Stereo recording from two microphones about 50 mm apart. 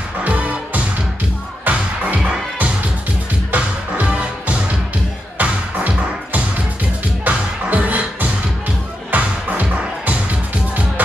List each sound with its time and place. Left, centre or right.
0.2 s music: right
3.5 s music: right